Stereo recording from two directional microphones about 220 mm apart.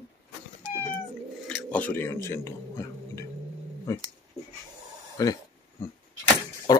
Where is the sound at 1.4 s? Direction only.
5° left (ahead or behind).